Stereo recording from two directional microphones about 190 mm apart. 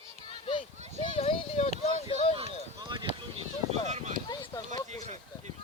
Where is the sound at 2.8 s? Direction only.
25° right (ahead or behind).